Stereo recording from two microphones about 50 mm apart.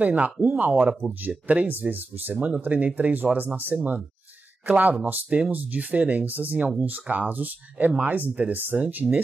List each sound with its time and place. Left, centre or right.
0.0 s speech: right